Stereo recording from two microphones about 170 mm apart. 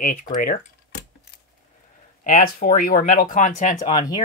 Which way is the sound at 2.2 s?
55° left (ahead or behind).